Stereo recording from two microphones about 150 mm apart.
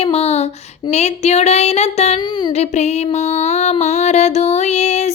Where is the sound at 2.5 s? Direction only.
45° left (ahead or behind).